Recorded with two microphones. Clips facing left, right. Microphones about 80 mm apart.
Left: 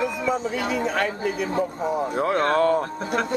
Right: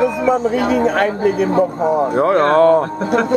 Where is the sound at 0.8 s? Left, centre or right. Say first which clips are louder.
Right 9 dB; right.